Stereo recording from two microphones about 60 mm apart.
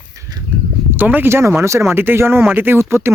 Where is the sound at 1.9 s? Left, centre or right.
Right.